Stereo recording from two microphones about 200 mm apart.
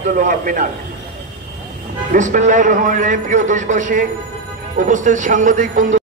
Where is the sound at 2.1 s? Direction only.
40° right (ahead or behind).